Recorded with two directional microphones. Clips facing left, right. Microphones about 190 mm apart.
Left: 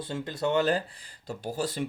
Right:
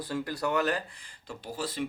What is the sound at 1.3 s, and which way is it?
Speech, 45° left (ahead or behind).